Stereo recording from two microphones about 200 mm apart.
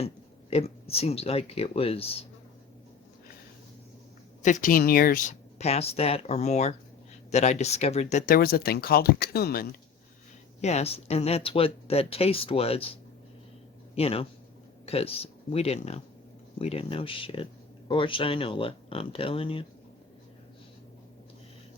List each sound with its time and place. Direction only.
0.5 s speech: 30° left (ahead or behind)
4.4 s speech: 40° left (ahead or behind)
5.5 s speech: 30° left (ahead or behind)
8.4 s speech: 50° left (ahead or behind)
10.6 s speech: 35° left (ahead or behind)
13.9 s speech: 30° left (ahead or behind)